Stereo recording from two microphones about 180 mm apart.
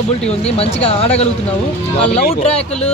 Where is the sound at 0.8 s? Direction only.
35° left (ahead or behind).